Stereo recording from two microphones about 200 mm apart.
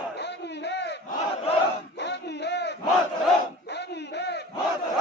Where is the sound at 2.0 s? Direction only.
60° left (ahead or behind).